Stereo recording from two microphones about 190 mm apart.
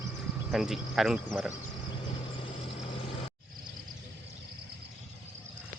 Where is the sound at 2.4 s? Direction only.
30° left (ahead or behind).